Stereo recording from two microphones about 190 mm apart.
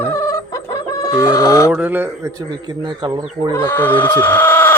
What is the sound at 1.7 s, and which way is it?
Speech, 10° right (ahead or behind).